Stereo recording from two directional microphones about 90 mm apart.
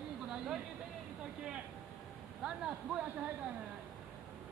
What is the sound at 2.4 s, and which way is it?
Speech, 10° right (ahead or behind).